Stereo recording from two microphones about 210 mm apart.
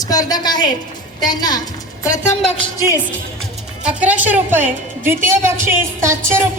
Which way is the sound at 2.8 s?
15° left (ahead or behind).